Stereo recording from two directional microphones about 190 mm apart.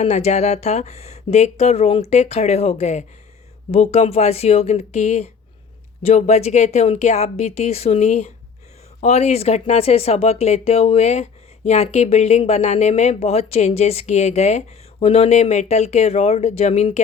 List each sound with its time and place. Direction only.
0.0 s speech: 35° left (ahead or behind)